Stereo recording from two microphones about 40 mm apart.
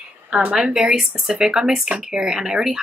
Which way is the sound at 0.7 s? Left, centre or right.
Centre.